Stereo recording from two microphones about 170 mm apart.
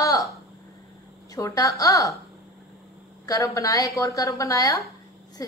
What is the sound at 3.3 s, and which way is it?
A woman's voice, 20° left (ahead or behind).